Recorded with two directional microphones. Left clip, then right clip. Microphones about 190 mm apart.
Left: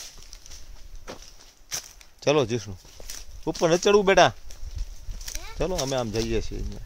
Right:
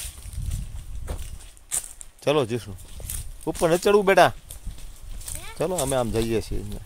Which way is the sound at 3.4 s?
Centre (ahead or behind).